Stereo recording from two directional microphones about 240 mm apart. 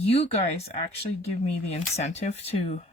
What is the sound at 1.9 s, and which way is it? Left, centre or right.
Speech, left.